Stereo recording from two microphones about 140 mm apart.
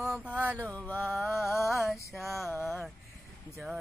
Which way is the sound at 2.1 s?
Centre (ahead or behind).